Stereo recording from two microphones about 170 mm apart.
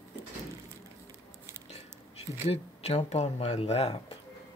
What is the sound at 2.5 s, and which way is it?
Speech, 40° left (ahead or behind).